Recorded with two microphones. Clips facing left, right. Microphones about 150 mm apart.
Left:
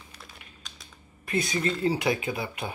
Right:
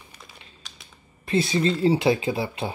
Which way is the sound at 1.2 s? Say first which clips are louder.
Right 6 dB; 30° right (ahead or behind).